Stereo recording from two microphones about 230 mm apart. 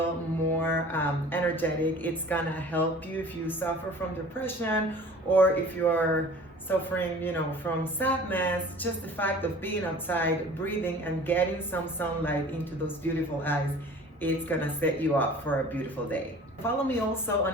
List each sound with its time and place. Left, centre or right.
0.6 s a woman's voice: centre
14.2 s a woman's voice: centre